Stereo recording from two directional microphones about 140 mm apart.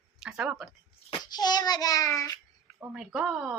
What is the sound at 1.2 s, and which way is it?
Child singing, 30° left (ahead or behind).